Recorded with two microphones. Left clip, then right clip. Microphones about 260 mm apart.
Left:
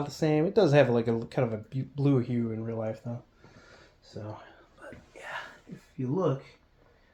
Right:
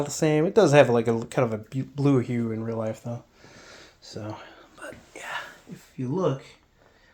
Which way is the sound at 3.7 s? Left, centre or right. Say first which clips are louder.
Right 8 dB; right.